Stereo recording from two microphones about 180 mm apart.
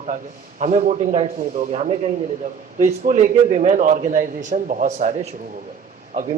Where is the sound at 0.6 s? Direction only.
40° right (ahead or behind).